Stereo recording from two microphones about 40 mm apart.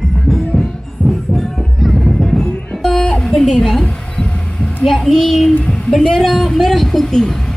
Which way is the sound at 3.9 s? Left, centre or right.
Left.